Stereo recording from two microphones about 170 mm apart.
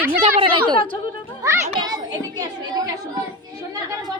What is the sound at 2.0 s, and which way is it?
Speech, 25° right (ahead or behind).